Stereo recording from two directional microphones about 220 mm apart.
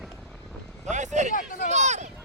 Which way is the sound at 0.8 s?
35° right (ahead or behind).